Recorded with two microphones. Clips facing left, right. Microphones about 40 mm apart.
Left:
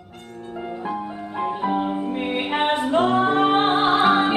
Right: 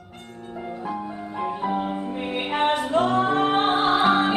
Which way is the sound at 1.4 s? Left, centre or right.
Centre.